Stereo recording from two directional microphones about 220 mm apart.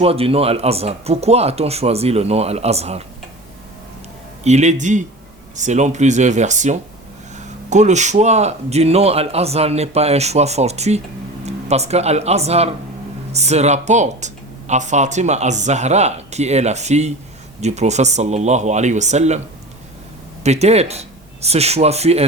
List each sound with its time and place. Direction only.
0.0 s speech: 25° right (ahead or behind)
4.4 s speech: 30° right (ahead or behind)
20.4 s speech: 30° right (ahead or behind)